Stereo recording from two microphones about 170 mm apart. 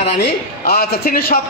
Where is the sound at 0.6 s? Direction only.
65° left (ahead or behind).